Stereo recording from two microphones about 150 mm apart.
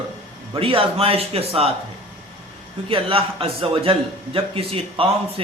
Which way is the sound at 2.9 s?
35° right (ahead or behind).